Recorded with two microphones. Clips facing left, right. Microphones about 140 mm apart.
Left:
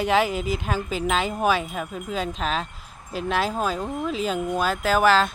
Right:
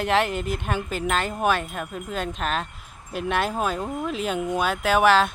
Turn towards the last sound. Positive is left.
turn(degrees=0)  # may be behind; listen again after turning